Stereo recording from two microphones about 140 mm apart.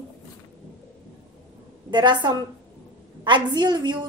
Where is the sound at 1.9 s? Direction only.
35° right (ahead or behind).